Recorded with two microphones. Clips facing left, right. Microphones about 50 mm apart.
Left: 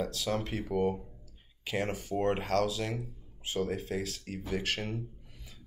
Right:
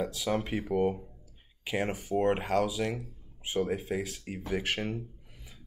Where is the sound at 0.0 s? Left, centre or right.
Centre.